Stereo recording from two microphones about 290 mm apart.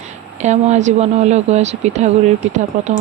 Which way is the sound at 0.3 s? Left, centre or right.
Right.